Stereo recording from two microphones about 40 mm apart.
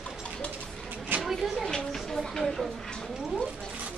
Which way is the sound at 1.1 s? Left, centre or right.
Right.